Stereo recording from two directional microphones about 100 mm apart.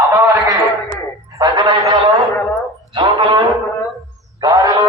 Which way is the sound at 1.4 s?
40° right (ahead or behind).